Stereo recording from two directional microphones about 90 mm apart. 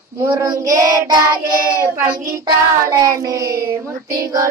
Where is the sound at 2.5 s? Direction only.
40° right (ahead or behind).